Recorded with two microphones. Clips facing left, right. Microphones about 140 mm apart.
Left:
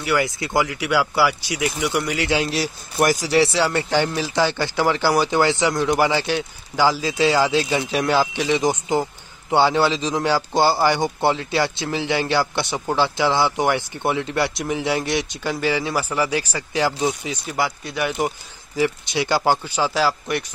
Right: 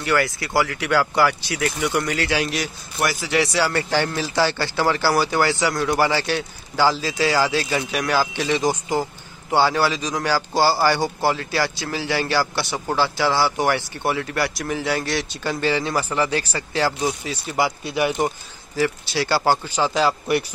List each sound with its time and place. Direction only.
0.6 s speech: 15° left (ahead or behind); by 2.7 s 30° left (ahead or behind)
3.0 s a man's voice: 40° left (ahead or behind); by 17.6 s 15° left (ahead or behind)
17.9 s a man's voice: 5° right (ahead or behind)
18.8 s speech: 15° left (ahead or behind)
19.8 s a man's voice: 5° left (ahead or behind)